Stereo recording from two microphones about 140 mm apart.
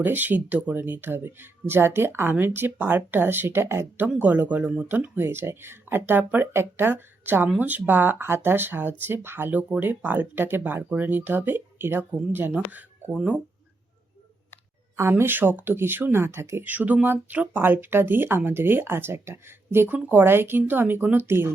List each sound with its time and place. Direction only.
0.0 s speech: 15° right (ahead or behind)
14.9 s speech: 15° right (ahead or behind)